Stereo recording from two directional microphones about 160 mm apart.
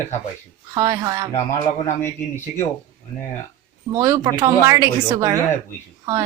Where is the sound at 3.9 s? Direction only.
20° right (ahead or behind).